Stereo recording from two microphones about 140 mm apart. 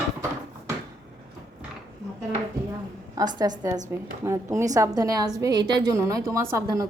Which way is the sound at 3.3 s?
30° right (ahead or behind).